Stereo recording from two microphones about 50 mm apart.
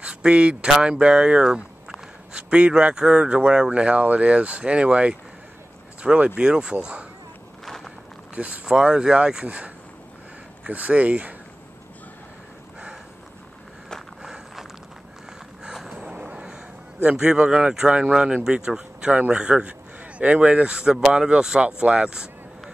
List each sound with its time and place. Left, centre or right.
0.0 s speech: right
6.1 s speech: right
7.6 s walk: centre
8.6 s speech: centre
10.7 s speech: right
15.6 s a sound: centre
15.9 s a sound: right
17.0 s speech: right
20.7 s speech: centre